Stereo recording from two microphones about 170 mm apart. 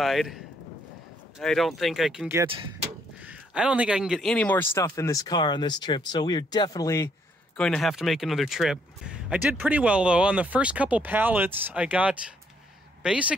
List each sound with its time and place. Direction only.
0.0 s speech: centre (ahead or behind)
1.4 s speech: centre (ahead or behind)
2.2 s speech: 10° right (ahead or behind); by 7.1 s 20° left (ahead or behind)
7.5 s speech: 5° left (ahead or behind)